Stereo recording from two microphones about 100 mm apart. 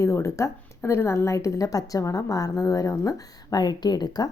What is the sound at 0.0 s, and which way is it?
Speech, 30° left (ahead or behind).